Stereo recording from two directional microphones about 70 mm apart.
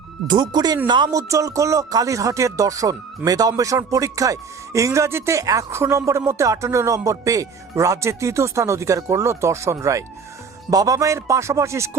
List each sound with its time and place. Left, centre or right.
0.3 s speech: right
0.9 s speech: right
1.1 s speech: right
10.7 s speech: right